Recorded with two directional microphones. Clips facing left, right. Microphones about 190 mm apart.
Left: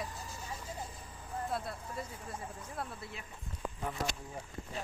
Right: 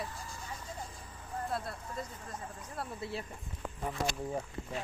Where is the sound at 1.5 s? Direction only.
5° left (ahead or behind).